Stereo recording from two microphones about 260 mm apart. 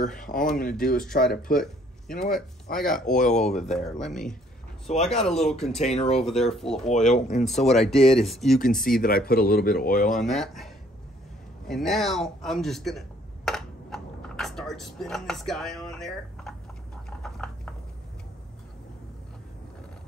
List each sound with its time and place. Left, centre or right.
0.2 s speech: left
2.7 s speech: left
4.0 s a man's voice: centre
4.8 s speech: left
5.2 s a man's voice: centre
6.9 s speech: left
7.6 s a man's voice: centre
8.8 s speech: left
10.2 s a man's voice: centre
13.5 s a sound: centre